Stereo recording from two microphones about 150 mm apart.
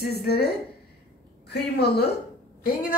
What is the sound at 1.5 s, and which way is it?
Speech, 90° left.